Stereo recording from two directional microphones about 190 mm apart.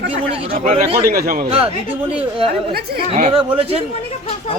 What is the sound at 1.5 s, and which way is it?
Speech, 30° right (ahead or behind).